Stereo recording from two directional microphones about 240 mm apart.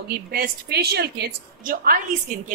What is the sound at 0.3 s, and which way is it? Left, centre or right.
A woman's voice, right.